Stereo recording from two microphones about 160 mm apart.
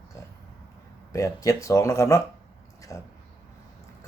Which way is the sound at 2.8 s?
20° left (ahead or behind).